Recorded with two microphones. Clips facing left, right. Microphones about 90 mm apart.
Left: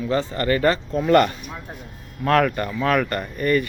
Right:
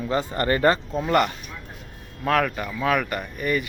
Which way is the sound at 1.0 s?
10° right (ahead or behind).